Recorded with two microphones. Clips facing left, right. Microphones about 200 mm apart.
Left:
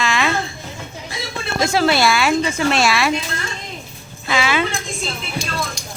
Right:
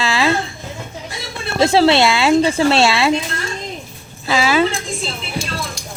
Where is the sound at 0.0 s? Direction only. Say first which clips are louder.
Right 3 dB; 30° right (ahead or behind).